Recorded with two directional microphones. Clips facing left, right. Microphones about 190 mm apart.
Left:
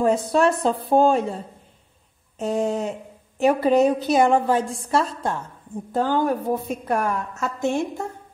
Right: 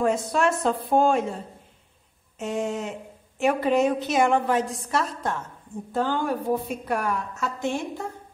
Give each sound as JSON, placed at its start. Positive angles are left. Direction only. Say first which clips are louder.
{"t": 0.0, "sound": "a woman's voice", "louder": "left 4 dB", "side_deg": 35}
{"t": 2.3, "sound": "a woman's voice", "louder": "left 5 dB", "side_deg": 35}
{"t": 5.9, "sound": "a woman's voice", "louder": "left 4 dB", "side_deg": 40}